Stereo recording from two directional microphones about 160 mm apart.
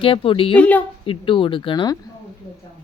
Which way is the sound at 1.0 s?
30° left (ahead or behind).